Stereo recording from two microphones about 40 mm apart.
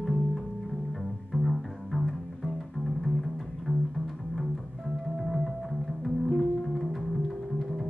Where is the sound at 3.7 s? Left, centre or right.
Right.